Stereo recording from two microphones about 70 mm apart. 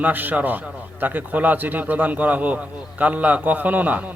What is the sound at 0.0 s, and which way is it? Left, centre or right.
A man's voice, right.